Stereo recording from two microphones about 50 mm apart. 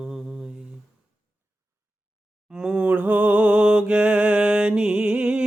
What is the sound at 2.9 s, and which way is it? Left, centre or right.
Music, right.